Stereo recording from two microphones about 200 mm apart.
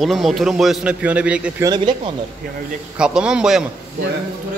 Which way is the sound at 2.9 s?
5° right (ahead or behind).